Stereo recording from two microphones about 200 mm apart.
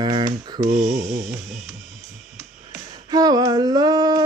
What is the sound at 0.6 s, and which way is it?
Speech, 40° right (ahead or behind).